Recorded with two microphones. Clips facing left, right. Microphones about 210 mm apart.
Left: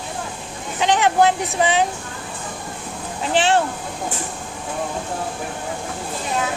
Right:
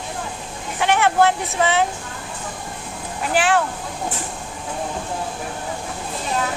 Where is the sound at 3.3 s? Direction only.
25° left (ahead or behind).